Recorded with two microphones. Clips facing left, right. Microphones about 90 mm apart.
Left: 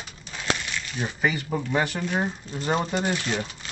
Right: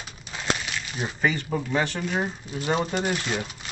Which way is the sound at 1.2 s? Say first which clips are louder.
Right 1 dB; 5° left (ahead or behind).